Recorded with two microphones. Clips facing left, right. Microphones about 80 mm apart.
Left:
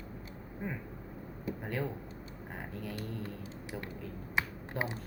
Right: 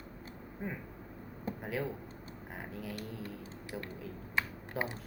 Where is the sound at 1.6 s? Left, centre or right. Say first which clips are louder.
Even; centre.